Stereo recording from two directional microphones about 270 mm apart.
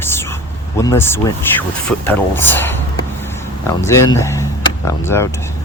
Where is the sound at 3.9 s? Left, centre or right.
Centre.